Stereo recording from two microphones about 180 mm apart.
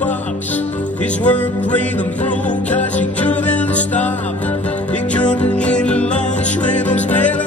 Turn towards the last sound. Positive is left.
turn(degrees=10)  # may be behind; listen again after turning